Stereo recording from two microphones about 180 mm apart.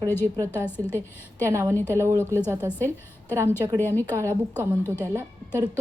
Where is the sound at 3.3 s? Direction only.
15° right (ahead or behind).